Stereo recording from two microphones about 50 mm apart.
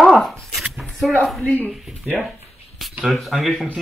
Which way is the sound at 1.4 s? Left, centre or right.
Left.